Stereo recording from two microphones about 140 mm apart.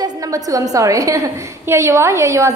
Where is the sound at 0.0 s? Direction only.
25° right (ahead or behind).